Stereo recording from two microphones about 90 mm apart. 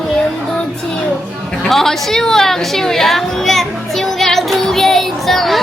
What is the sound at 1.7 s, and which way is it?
A woman's voice, 5° left (ahead or behind).